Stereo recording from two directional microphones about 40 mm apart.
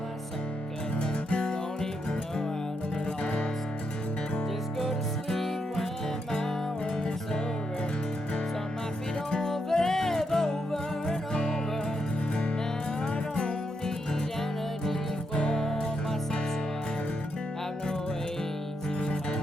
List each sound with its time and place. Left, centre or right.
0.9 s music: left
4.8 s music: centre
9.3 s music: centre
13.1 s music: left
15.4 s music: centre
18.9 s music: left